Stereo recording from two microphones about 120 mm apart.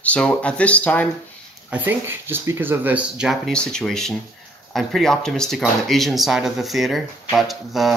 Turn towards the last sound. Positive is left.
turn(degrees=0)  # may be behind; listen again after turning